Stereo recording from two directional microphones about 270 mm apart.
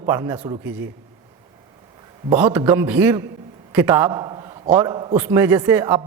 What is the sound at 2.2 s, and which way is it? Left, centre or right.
A man's voice, centre.